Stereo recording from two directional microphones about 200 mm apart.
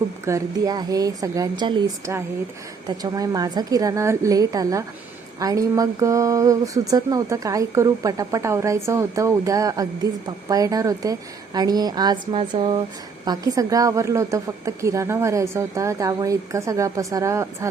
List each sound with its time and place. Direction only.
0.3 s a woman's voice: 15° right (ahead or behind)
13.2 s speech: 20° right (ahead or behind)